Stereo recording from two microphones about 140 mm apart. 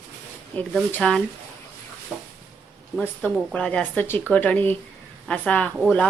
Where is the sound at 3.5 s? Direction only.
10° left (ahead or behind).